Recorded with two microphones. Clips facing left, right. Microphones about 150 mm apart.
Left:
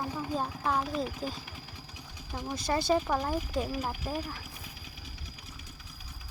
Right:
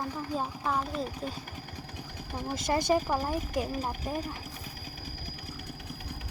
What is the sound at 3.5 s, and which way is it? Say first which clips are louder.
Speech: right 1 dB; 15° right (ahead or behind).